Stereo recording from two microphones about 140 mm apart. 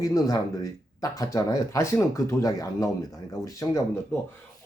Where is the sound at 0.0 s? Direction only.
25° left (ahead or behind).